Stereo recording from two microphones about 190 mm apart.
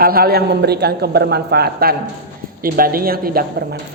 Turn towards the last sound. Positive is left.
turn(degrees=-50)  # may be behind; listen again after turning